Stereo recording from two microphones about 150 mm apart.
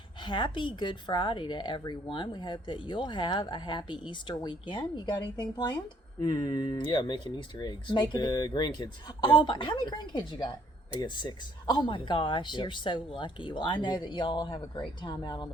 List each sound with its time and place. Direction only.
0.2 s a woman's voice: 30° left (ahead or behind)